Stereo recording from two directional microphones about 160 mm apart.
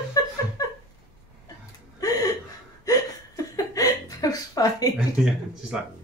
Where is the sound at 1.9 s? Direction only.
25° left (ahead or behind).